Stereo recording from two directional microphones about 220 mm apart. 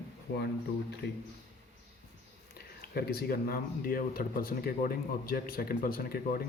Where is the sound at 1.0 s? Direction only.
50° left (ahead or behind).